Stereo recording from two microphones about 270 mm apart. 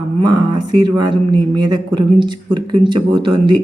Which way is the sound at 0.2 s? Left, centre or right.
Centre.